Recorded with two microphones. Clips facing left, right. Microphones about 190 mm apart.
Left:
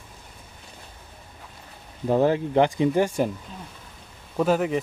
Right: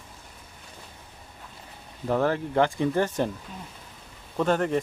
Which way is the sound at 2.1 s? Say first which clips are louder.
Left 4 dB; 15° left (ahead or behind).